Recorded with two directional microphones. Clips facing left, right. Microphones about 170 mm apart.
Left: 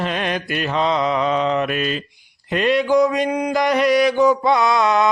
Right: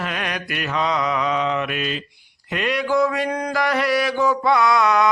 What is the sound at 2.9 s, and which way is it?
Mantra, 20° left (ahead or behind).